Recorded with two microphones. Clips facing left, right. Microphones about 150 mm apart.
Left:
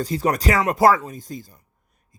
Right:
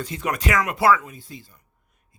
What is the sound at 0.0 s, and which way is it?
Speech, 35° left (ahead or behind).